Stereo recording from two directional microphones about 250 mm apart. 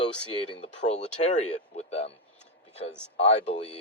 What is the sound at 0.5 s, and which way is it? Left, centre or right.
Speech, left.